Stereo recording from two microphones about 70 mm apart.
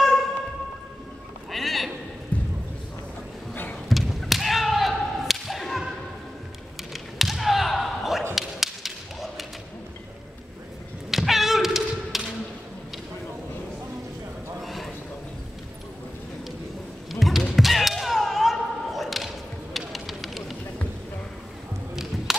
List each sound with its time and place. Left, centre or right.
0.0 s a sound: centre
1.5 s sheep: centre
3.9 s whip: centre
6.8 s basketball bounce: centre
8.4 s whip: centre
11.1 s cat: centre
14.6 s a sound: centre
17.1 s music: centre
17.6 s slam: centre
22.3 s a sound: centre